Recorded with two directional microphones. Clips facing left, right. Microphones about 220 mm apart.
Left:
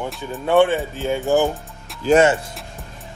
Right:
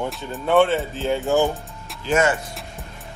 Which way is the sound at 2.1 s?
25° left (ahead or behind).